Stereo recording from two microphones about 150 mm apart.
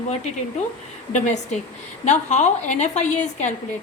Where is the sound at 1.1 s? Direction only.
55° left (ahead or behind).